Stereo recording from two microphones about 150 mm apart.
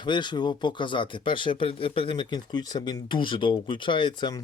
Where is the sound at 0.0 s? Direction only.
30° left (ahead or behind).